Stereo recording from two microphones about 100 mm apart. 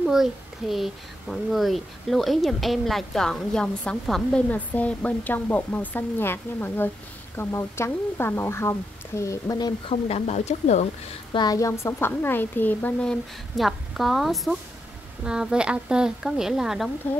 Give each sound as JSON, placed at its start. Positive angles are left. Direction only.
{"t": 0.0, "sound": "a child's voice", "side_deg": -5}
{"t": 9.8, "sound": "speech", "side_deg": 90}
{"t": 11.3, "sound": "a woman's voice", "side_deg": 40}
{"t": 13.0, "sound": "a child's voice", "side_deg": 5}